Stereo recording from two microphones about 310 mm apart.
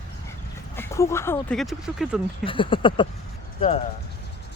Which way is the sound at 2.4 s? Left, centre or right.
Centre.